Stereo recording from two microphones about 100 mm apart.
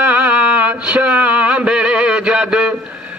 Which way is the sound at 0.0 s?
15° right (ahead or behind).